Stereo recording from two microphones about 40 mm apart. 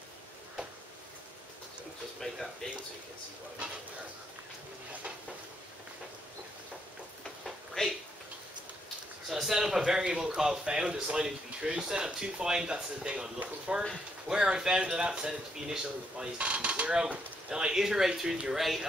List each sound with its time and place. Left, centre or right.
2.1 s speech: centre
7.8 s a sound: centre
9.3 s speech: centre
9.8 s speech: centre
16.3 s speech: right; by 18.9 s centre